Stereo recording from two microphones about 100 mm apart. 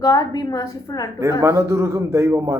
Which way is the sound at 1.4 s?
30° right (ahead or behind).